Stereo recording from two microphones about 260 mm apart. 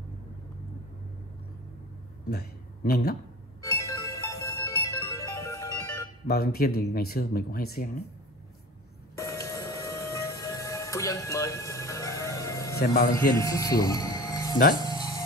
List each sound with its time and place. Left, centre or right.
2.2 s a man's voice: left
3.7 s music: centre
6.2 s speech: left
9.2 s music: centre
12.7 s a man's voice: left
13.3 s speech: centre
14.8 s music: centre